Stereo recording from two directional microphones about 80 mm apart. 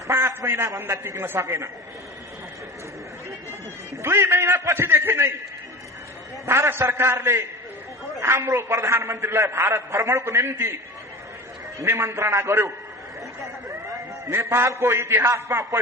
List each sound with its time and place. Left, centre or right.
0.1 s a man's voice: right
4.0 s a man's voice: right
6.4 s a man's voice: right
11.8 s a man's voice: right
14.3 s a man's voice: right